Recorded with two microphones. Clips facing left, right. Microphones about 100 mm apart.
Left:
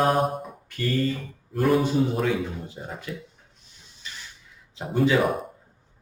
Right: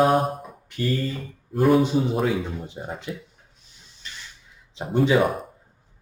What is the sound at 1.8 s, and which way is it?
Speech, 20° right (ahead or behind).